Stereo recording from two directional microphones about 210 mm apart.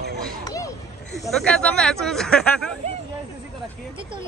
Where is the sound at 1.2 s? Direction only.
5° left (ahead or behind).